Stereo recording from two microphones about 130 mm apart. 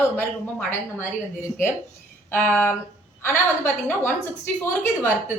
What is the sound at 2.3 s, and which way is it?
A woman's voice, 10° left (ahead or behind).